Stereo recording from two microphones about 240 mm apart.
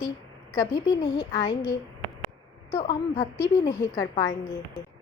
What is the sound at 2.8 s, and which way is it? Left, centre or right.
Speech, left.